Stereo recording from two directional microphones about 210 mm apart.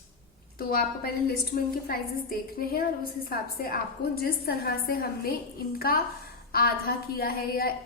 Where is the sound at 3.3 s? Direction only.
45° left (ahead or behind).